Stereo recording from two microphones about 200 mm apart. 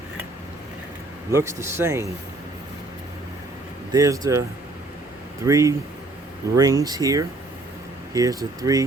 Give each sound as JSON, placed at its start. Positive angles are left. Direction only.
{"t": 1.3, "sound": "speech", "side_deg": -15}
{"t": 3.9, "sound": "speech", "side_deg": -15}